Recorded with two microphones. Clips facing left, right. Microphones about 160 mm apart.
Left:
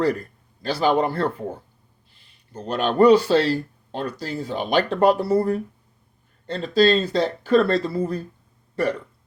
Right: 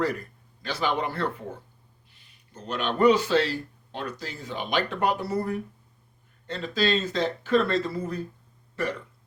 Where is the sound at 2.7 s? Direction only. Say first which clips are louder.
Left 6 dB; 35° left (ahead or behind).